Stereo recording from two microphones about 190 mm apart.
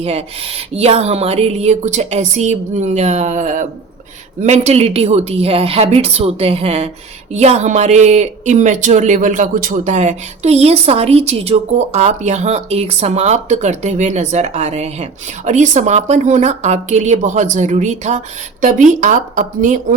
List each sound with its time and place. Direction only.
0.0 s a woman's voice: 30° right (ahead or behind)